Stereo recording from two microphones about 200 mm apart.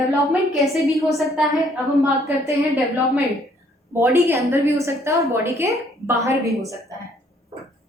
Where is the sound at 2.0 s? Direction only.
15° right (ahead or behind).